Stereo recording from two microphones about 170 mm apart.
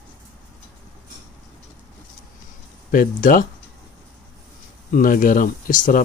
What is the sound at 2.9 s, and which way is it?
Speech, 55° left (ahead or behind).